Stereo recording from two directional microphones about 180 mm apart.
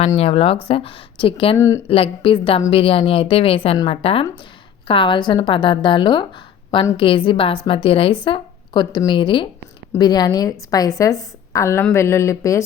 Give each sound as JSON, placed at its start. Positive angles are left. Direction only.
{"t": 0.2, "sound": "a woman's voice", "side_deg": 30}
{"t": 1.5, "sound": "a woman's voice", "side_deg": 15}
{"t": 1.9, "sound": "a woman's voice", "side_deg": 30}